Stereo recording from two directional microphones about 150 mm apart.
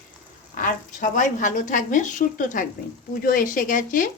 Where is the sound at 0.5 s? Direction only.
60° left (ahead or behind).